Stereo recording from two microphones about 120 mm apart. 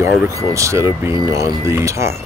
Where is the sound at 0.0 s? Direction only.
25° right (ahead or behind).